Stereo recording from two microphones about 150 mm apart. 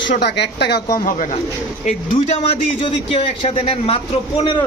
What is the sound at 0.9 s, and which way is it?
Speech, 60° left (ahead or behind).